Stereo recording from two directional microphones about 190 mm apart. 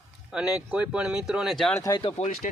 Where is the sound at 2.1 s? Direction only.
40° left (ahead or behind).